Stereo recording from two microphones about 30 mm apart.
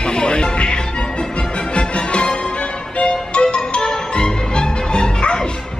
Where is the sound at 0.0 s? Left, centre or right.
Left.